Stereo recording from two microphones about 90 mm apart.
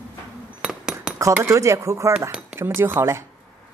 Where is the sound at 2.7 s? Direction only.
25° right (ahead or behind).